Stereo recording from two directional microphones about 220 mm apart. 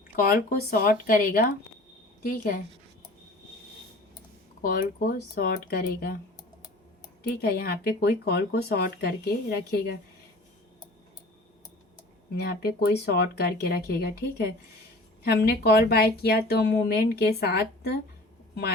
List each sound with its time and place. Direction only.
0.2 s speech: 40° left (ahead or behind)
4.6 s speech: 40° left (ahead or behind)
7.2 s speech: 45° left (ahead or behind)
12.4 s speech: 45° left (ahead or behind)